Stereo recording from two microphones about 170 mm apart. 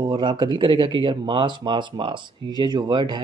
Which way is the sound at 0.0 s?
25° right (ahead or behind).